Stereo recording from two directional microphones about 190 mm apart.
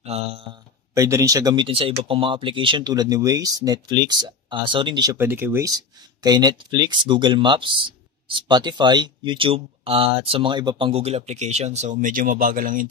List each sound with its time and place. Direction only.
0.0 s speech: 30° right (ahead or behind)
0.9 s speech: 15° right (ahead or behind)
5.1 s speech: 10° right (ahead or behind); by 12.8 s 45° right (ahead or behind)